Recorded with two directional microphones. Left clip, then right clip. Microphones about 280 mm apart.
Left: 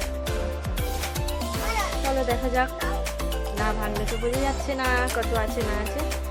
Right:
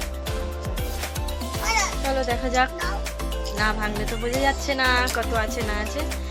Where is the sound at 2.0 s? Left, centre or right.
Centre.